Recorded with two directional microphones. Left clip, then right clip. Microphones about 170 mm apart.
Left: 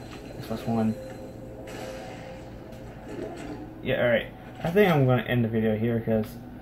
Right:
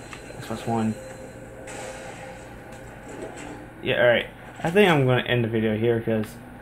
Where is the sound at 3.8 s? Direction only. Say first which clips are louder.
Right 4 dB; 55° right (ahead or behind).